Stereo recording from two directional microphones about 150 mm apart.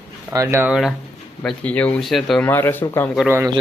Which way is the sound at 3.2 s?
15° right (ahead or behind).